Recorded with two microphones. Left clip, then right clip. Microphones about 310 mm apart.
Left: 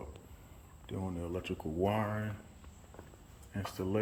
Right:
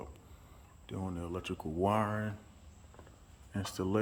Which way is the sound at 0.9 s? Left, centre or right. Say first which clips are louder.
Left 1 dB; centre.